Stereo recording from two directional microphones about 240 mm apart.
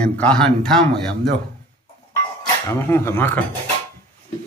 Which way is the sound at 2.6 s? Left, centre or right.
Centre.